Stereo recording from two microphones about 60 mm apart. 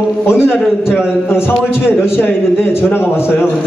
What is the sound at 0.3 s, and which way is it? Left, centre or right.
Speech, left.